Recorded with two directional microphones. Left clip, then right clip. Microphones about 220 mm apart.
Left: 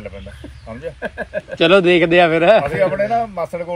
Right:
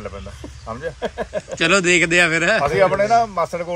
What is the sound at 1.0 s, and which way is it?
Speech, 5° left (ahead or behind).